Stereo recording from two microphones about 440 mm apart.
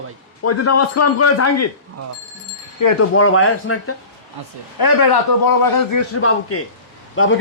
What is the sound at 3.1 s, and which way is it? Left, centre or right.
Speech, left.